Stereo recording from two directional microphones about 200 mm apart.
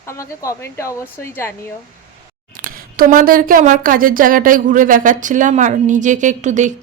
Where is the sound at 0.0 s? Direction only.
15° left (ahead or behind).